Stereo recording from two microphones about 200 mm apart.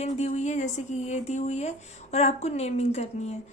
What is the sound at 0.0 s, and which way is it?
A woman's voice, 35° left (ahead or behind).